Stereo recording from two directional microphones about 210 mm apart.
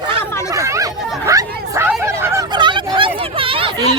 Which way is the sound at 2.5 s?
20° right (ahead or behind).